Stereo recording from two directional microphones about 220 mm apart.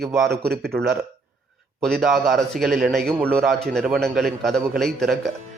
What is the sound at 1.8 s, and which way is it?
A man's voice, centre (ahead or behind).